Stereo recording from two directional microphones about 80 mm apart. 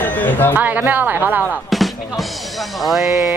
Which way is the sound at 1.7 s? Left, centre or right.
Centre.